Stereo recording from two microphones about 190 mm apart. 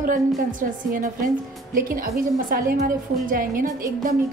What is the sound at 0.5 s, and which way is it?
A woman's voice, 45° right (ahead or behind).